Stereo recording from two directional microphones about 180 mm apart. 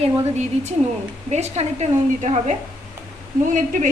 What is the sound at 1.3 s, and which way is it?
A woman's voice, 40° right (ahead or behind).